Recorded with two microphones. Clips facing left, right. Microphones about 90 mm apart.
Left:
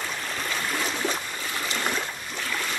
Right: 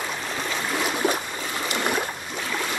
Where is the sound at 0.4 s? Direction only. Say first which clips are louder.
Right 3 dB; 5° right (ahead or behind).